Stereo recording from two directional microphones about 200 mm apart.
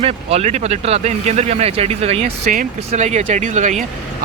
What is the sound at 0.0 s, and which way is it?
Speech, 30° right (ahead or behind).